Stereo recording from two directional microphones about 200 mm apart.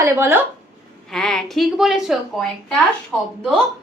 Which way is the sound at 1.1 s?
Centre (ahead or behind).